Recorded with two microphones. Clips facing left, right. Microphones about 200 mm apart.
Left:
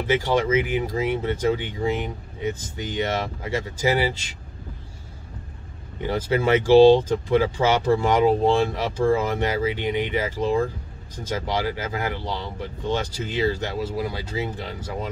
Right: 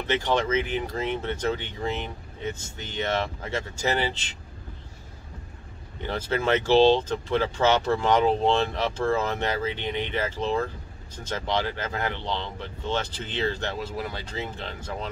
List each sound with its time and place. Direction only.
0.0 s speech: 10° left (ahead or behind)
6.0 s speech: 10° left (ahead or behind)